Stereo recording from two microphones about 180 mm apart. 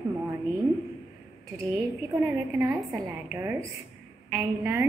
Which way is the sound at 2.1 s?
10° right (ahead or behind).